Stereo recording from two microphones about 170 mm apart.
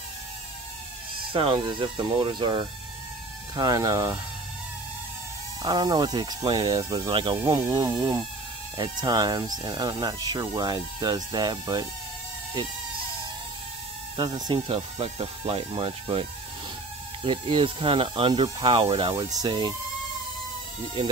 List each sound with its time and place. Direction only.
1.3 s speech: 30° right (ahead or behind)
5.6 s speech: 25° right (ahead or behind)
14.1 s speech: 25° right (ahead or behind)